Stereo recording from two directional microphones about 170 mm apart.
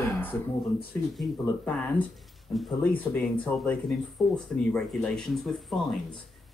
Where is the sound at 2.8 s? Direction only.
10° left (ahead or behind).